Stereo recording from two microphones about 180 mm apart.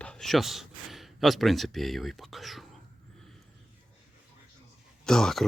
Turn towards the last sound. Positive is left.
turn(degrees=0)  # may be behind; listen again after turning